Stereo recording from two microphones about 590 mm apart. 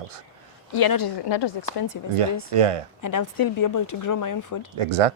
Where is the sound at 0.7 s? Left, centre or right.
Left.